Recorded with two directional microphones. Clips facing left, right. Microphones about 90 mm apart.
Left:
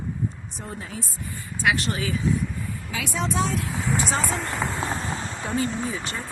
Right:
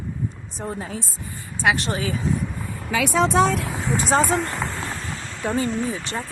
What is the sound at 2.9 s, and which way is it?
Speech, 75° right (ahead or behind).